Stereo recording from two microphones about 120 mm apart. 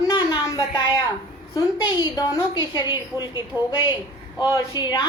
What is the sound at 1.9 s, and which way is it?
A woman's voice, 30° left (ahead or behind).